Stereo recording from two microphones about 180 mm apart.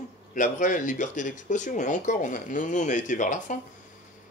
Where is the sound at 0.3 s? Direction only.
45° left (ahead or behind).